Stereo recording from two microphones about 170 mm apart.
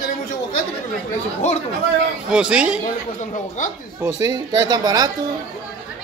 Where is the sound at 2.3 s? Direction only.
5° right (ahead or behind).